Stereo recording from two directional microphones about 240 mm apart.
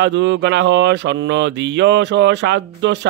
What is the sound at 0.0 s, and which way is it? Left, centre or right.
Speech, right.